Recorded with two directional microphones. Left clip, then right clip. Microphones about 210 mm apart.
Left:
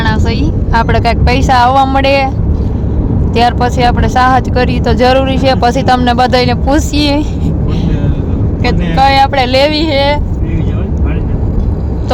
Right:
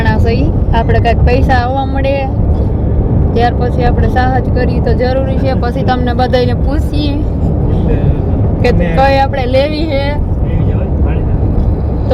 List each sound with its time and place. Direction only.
0.3 s vehicle: 55° left (ahead or behind)
0.9 s speech: 15° left (ahead or behind)
3.3 s speech: 20° left (ahead or behind)
8.6 s speech: 5° left (ahead or behind)
9.3 s speech: 20° left (ahead or behind)